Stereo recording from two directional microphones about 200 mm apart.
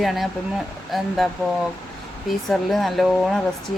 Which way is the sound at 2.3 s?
Centre (ahead or behind).